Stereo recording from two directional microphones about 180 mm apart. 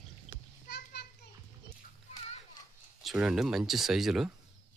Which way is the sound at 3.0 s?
Centre (ahead or behind).